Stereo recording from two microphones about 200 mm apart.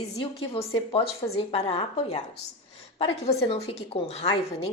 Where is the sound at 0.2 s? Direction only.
25° left (ahead or behind).